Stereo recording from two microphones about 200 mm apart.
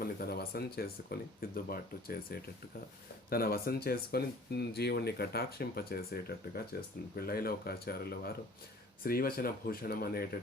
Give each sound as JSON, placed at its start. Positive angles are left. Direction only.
{"t": 0.0, "sound": "speech", "side_deg": 50}